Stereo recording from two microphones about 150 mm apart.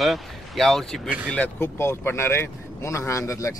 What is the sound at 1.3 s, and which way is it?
Speech, 10° left (ahead or behind).